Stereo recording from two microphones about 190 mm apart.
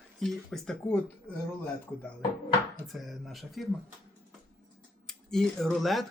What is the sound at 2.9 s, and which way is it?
Speech, centre (ahead or behind).